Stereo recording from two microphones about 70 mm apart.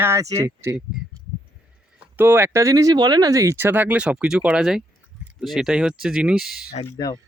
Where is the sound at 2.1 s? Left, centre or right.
Right.